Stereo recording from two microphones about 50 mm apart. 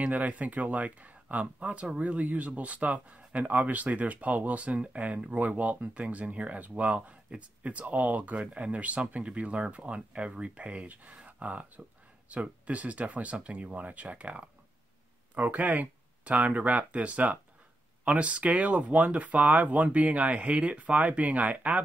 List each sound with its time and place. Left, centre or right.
0.0 s speech: right